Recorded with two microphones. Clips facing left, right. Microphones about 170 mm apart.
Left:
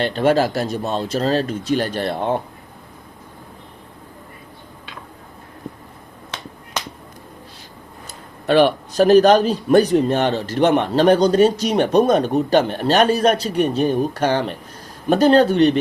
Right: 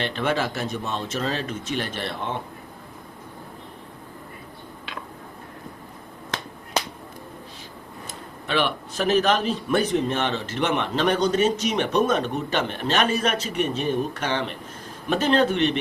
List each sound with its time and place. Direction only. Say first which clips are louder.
0.0 s speech: left 8 dB; 35° left (ahead or behind)
8.0 s speech: left 12 dB; 40° left (ahead or behind)